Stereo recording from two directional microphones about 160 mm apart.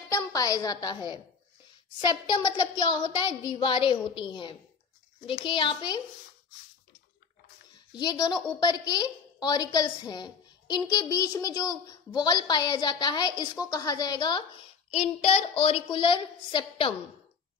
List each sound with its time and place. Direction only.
0.1 s a woman's voice: 20° left (ahead or behind)
7.9 s a woman's voice: 25° left (ahead or behind)
14.9 s a child's voice: 40° left (ahead or behind)